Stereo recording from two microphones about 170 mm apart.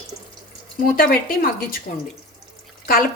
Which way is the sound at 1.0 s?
60° left (ahead or behind).